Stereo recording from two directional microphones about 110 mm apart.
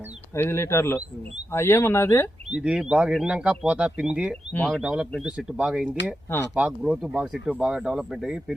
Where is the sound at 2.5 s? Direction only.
10° right (ahead or behind).